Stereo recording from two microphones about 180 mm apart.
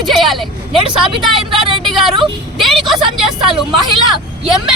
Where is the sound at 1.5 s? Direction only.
30° right (ahead or behind).